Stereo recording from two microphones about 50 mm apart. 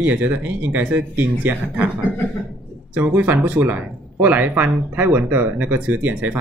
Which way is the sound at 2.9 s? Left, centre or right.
Right.